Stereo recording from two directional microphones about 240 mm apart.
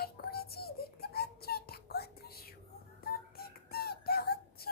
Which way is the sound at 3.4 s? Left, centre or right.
Left.